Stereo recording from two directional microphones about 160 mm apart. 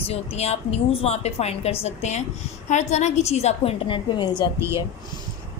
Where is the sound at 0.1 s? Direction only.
40° left (ahead or behind).